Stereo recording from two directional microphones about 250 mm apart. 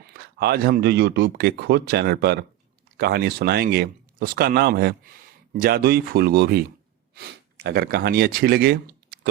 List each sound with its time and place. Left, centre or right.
0.0 s speech: right